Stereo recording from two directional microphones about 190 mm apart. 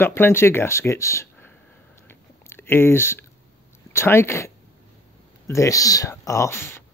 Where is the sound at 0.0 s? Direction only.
10° left (ahead or behind).